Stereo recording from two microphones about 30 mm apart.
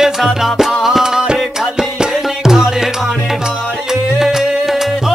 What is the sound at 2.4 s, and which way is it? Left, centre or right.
Music, centre.